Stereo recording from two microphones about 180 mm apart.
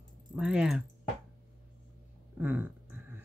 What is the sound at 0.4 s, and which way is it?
Speech, 5° right (ahead or behind).